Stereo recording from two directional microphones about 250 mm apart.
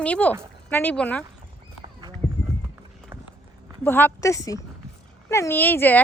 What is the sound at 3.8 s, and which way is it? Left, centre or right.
Speech, centre.